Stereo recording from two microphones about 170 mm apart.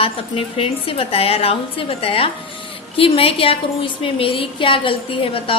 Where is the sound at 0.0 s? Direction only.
35° left (ahead or behind).